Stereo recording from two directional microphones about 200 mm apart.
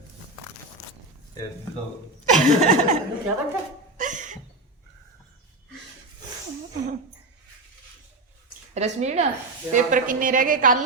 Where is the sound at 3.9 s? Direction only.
40° right (ahead or behind).